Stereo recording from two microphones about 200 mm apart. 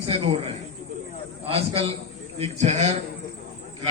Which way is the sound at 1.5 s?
30° right (ahead or behind).